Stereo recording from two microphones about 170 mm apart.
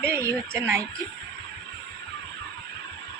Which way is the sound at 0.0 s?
15° right (ahead or behind).